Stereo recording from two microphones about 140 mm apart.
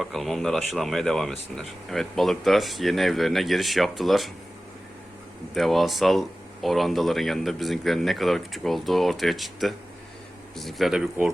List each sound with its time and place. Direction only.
0.0 s speech: centre (ahead or behind)
5.5 s speech: centre (ahead or behind)